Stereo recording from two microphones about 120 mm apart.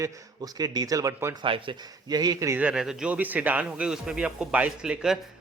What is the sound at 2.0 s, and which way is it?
Speech, 35° right (ahead or behind).